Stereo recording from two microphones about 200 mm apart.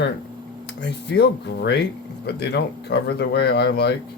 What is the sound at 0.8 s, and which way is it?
Speech, 60° left (ahead or behind).